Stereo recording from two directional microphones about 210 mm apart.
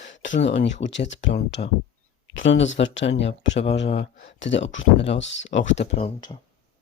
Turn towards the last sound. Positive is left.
turn(degrees=30)  # may be behind; listen again after turning